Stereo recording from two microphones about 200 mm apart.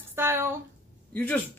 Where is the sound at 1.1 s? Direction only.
10° left (ahead or behind).